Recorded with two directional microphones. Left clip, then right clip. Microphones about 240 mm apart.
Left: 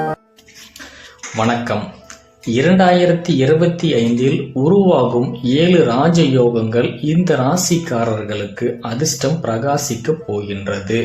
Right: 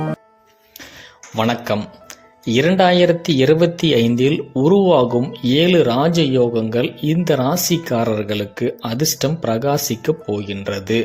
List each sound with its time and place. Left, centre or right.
1.4 s speech: right